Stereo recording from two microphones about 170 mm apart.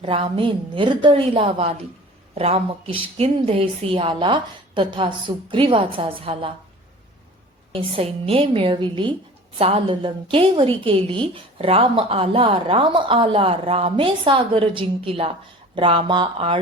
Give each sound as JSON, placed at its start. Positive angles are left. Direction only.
{"t": 0.0, "sound": "a woman's voice", "side_deg": -30}
{"t": 7.7, "sound": "a woman's voice", "side_deg": -30}